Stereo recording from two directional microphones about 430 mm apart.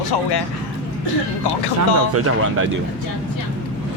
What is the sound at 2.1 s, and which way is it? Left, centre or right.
Speech, right.